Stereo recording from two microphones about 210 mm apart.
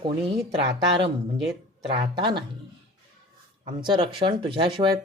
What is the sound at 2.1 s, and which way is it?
Speech, 20° right (ahead or behind).